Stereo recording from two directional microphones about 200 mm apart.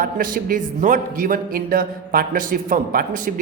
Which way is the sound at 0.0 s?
45° right (ahead or behind).